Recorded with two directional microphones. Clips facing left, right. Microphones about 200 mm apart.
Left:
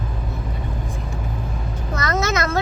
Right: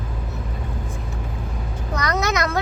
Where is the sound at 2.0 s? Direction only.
15° right (ahead or behind).